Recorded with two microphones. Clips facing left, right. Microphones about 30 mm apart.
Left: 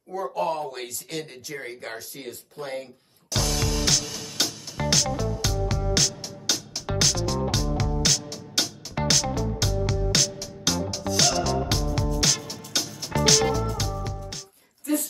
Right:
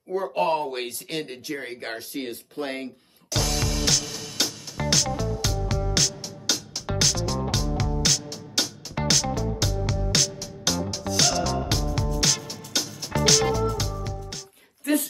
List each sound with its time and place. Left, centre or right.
0.1 s speech: right
0.9 s speech: right
3.3 s music: centre
14.9 s a sound: right